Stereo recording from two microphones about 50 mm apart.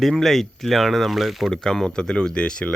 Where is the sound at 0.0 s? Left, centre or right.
Centre.